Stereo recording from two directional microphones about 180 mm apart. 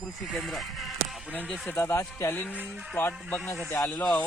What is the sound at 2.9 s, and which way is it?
Speech, 15° left (ahead or behind).